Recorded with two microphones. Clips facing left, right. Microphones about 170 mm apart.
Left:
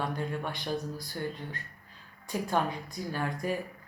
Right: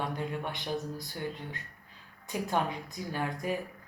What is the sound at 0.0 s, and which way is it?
A woman's voice, 20° right (ahead or behind).